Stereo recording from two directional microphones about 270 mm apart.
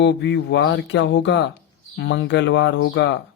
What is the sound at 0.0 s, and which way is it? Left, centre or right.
Speech, left.